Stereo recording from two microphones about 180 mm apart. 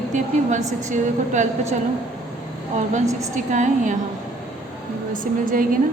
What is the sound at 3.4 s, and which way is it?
Speech, 45° right (ahead or behind).